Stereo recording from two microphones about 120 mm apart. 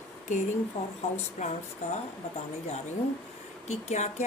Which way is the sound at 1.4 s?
80° left.